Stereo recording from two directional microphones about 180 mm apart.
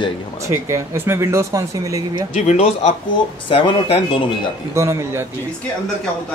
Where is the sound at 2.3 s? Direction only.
40° left (ahead or behind).